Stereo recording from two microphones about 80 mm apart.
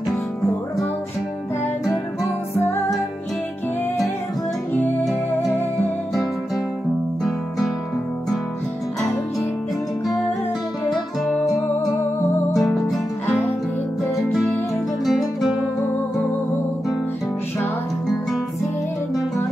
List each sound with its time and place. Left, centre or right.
2.5 s music: left
7.2 s music: centre
10.9 s music: centre
12.5 s music: centre
15.0 s music: centre